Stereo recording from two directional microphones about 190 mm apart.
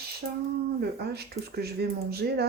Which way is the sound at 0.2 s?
50° right (ahead or behind).